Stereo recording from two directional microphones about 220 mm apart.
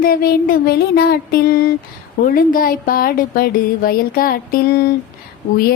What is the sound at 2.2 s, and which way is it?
Music, 40° left (ahead or behind).